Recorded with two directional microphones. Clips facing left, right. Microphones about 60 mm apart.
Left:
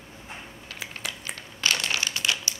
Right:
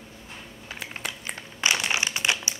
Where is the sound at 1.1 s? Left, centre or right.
Centre.